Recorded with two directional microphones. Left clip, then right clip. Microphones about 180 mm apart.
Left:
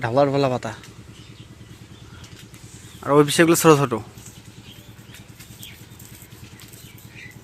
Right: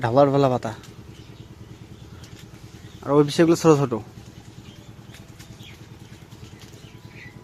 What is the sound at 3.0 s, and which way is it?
Speech, 5° left (ahead or behind).